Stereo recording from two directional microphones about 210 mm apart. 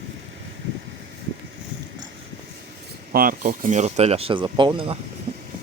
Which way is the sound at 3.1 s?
45° right (ahead or behind).